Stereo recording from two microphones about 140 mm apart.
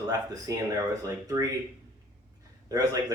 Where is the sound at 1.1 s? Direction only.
25° right (ahead or behind).